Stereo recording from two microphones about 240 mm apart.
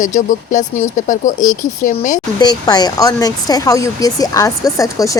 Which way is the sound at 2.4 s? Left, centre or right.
Centre.